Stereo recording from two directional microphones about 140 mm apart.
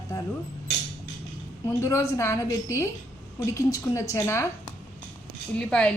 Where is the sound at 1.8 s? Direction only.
20° left (ahead or behind).